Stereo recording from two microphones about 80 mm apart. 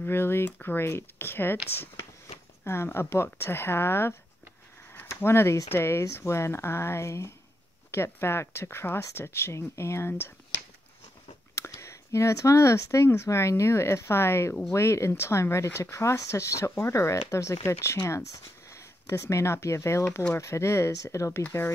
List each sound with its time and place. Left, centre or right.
0.0 s speech: left
2.6 s speech: left
5.2 s speech: left
11.5 s speech: left
21.4 s speech: left